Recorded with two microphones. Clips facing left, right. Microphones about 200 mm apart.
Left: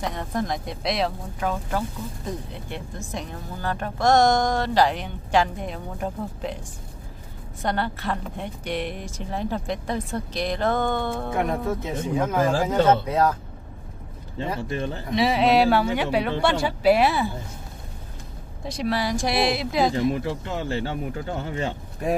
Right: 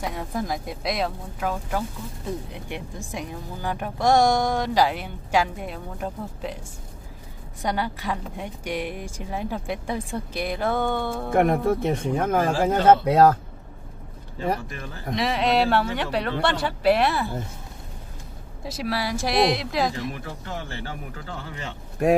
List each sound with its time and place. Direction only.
0.0 s speech: 5° right (ahead or behind)
7.6 s speech: 10° right (ahead or behind)
11.3 s speech: 60° right (ahead or behind)
14.6 s speech: 30° left (ahead or behind)
15.1 s speech: 5° left (ahead or behind)
18.6 s speech: 5° right (ahead or behind)
20.0 s speech: 25° left (ahead or behind)
22.0 s speech: 70° right (ahead or behind)